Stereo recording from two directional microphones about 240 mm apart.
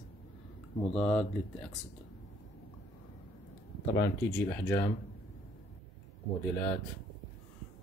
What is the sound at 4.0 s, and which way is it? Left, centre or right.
Speech, centre.